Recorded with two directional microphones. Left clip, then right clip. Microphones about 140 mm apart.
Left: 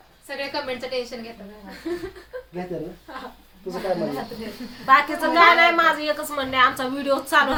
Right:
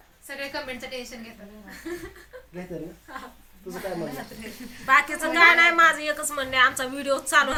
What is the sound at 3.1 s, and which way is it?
Speech, 10° right (ahead or behind).